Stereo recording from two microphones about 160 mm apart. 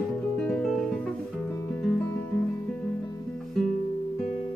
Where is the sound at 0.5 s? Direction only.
Centre (ahead or behind).